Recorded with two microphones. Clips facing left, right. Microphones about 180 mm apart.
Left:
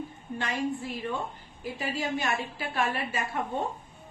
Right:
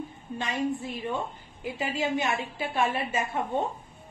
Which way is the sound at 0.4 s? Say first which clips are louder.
Right 1 dB; 20° right (ahead or behind).